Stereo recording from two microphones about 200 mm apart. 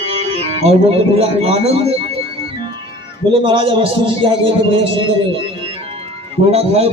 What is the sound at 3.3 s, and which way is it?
A man's voice, 25° right (ahead or behind).